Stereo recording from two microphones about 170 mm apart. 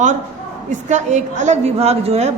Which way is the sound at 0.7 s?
45° right (ahead or behind).